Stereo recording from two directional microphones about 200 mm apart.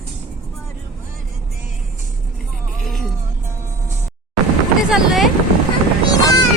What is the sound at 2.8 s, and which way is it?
Vehicle, centre (ahead or behind).